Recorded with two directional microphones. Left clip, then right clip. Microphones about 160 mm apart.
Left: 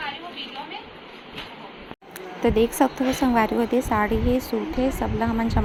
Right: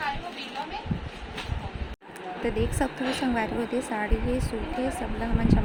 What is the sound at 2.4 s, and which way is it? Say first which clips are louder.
Speech: left 9 dB; 20° left (ahead or behind).